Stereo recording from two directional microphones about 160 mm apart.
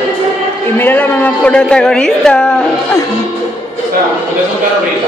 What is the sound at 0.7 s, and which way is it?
A woman's voice, 10° left (ahead or behind).